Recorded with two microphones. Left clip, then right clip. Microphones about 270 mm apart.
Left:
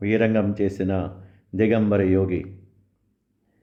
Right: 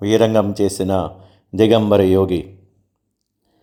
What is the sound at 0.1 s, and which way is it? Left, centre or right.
Speech, centre.